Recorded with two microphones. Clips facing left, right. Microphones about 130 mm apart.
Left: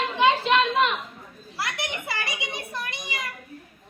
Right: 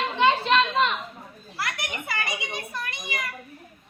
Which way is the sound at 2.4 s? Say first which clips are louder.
Even; 20° left (ahead or behind).